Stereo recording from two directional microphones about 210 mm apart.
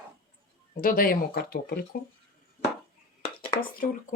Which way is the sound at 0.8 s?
40° left (ahead or behind).